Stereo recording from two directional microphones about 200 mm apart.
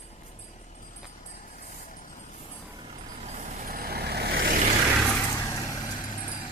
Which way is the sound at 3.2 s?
35° right (ahead or behind).